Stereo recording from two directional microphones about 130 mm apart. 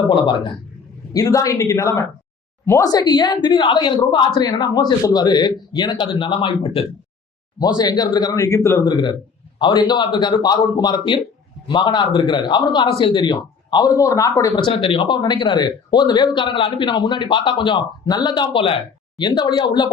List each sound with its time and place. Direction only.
0.1 s a man's voice: 40° left (ahead or behind)
1.1 s a man's voice: 25° left (ahead or behind); by 6.8 s 45° left (ahead or behind)
7.6 s a man's voice: 30° left (ahead or behind)